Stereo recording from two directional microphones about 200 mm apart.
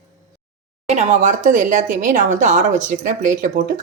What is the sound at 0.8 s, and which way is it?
Speech, 35° right (ahead or behind).